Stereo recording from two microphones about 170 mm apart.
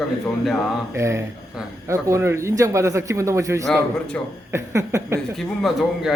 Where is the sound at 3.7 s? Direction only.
5° left (ahead or behind).